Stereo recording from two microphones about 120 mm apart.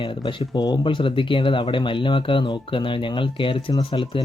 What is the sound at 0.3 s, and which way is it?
Speech, 40° left (ahead or behind).